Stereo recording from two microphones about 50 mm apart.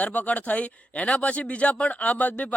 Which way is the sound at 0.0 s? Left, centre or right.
Left.